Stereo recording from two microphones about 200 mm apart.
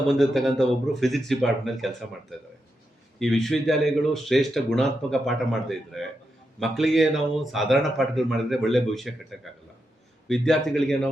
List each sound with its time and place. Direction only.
0.1 s speech: centre (ahead or behind)
3.2 s speech: centre (ahead or behind)